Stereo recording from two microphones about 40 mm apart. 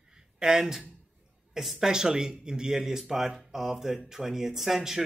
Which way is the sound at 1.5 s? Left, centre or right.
Centre.